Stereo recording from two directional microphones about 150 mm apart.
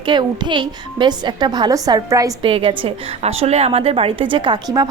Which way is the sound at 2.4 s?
35° right (ahead or behind).